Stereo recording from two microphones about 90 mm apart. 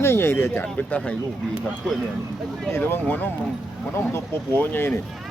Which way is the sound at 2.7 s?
25° left (ahead or behind).